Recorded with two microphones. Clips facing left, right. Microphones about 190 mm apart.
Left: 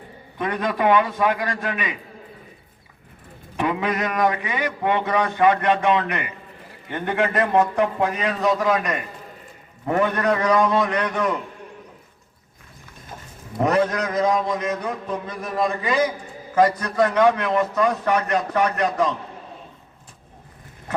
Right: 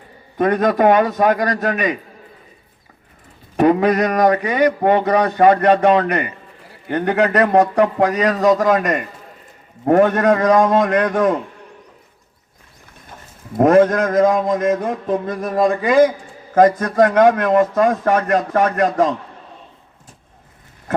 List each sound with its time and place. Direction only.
0.3 s mantra: 45° right (ahead or behind)
3.6 s a man's voice: 40° right (ahead or behind)
7.9 s mantra: 40° right (ahead or behind)
13.6 s mantra: 50° right (ahead or behind)